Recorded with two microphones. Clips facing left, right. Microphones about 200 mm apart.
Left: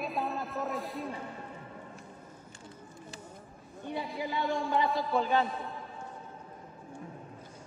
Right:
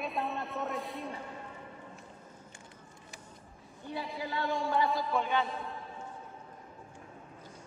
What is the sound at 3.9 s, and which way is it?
Speech, 20° left (ahead or behind).